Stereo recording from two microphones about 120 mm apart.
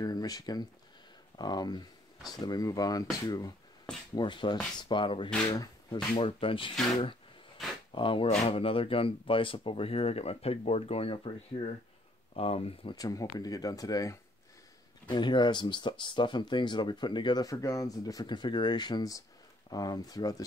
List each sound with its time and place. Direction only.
0.0 s speech: 35° left (ahead or behind)
5.5 s a sound: 30° left (ahead or behind)
6.1 s speech: 45° left (ahead or behind)
7.9 s speech: 45° left (ahead or behind)
12.9 s speech: 30° left (ahead or behind)